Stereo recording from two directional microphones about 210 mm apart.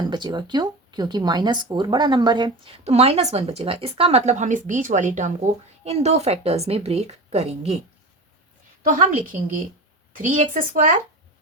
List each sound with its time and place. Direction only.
0.0 s speech: 20° right (ahead or behind)
8.8 s speech: 40° right (ahead or behind)